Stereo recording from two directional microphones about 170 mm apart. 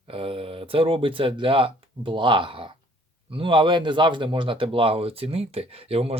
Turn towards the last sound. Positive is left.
turn(degrees=-35)  # may be behind; listen again after turning